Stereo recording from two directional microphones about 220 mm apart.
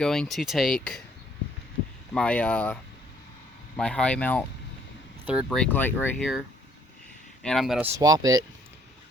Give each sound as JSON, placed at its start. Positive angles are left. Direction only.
{"t": 0.0, "sound": "speech", "side_deg": 5}
{"t": 2.1, "sound": "speech", "side_deg": 5}
{"t": 3.8, "sound": "speech", "side_deg": 5}
{"t": 5.2, "sound": "speech", "side_deg": -5}
{"t": 7.4, "sound": "speech", "side_deg": 0}
{"t": 7.9, "sound": "speech", "side_deg": -15}